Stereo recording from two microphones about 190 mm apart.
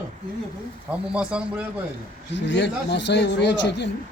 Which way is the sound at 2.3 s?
65° left (ahead or behind).